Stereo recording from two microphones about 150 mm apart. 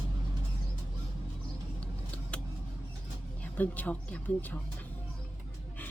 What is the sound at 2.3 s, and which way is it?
Vehicle, 10° left (ahead or behind).